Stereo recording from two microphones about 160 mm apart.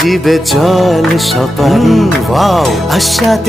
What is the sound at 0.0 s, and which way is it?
Music, centre (ahead or behind).